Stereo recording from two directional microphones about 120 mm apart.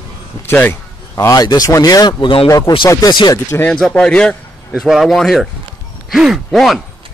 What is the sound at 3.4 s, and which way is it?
Speech, 20° left (ahead or behind).